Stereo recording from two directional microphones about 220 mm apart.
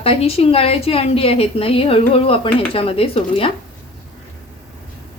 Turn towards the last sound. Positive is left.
turn(degrees=25)  # may be behind; listen again after turning